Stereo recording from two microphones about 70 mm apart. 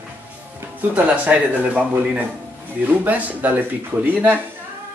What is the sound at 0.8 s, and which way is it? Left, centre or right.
Speech, right.